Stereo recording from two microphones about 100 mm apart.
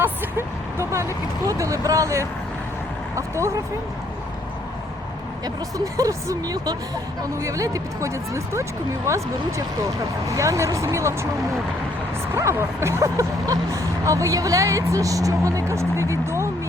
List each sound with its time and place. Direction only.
0.0 s speech: 25° right (ahead or behind)
5.7 s speech: 35° right (ahead or behind)
12.3 s speech: 25° right (ahead or behind)